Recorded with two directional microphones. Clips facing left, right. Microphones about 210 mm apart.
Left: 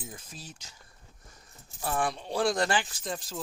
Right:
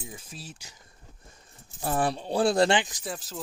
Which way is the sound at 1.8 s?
35° right (ahead or behind).